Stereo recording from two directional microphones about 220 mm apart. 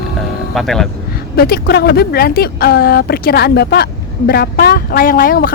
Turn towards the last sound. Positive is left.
turn(degrees=40)  # may be behind; listen again after turning